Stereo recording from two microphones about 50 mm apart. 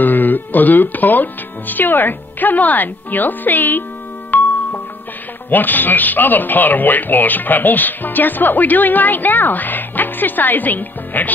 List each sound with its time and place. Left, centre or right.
0.0 s speech: left
4.3 s music: left
5.5 s speech: left